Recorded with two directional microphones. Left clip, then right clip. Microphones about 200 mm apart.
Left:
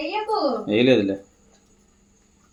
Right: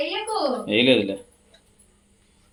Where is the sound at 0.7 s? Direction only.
15° left (ahead or behind).